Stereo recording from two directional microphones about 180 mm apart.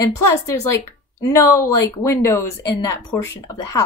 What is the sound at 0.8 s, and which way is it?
A woman's voice, 15° left (ahead or behind).